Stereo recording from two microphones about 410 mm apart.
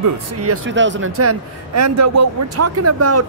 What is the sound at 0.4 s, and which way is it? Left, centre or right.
Speech, right.